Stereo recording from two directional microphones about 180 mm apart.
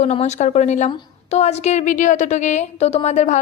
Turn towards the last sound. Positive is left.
turn(degrees=40)  # may be behind; listen again after turning